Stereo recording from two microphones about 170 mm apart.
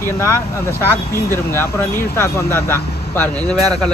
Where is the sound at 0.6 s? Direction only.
15° left (ahead or behind).